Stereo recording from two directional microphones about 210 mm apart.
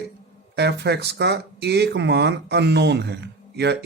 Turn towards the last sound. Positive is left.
turn(degrees=-55)  # may be behind; listen again after turning